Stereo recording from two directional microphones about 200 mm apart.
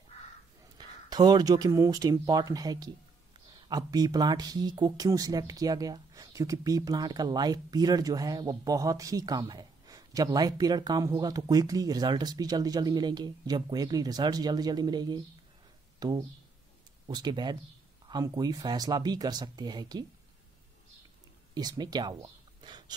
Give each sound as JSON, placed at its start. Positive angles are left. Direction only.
{"t": 0.7, "sound": "speech", "side_deg": -20}
{"t": 21.5, "sound": "speech", "side_deg": -20}